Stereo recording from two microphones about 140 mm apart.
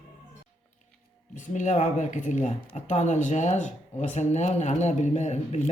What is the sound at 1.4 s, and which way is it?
Speech, 60° left (ahead or behind).